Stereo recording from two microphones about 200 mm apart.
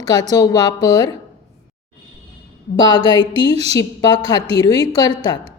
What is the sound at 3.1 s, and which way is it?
Speech, 25° right (ahead or behind).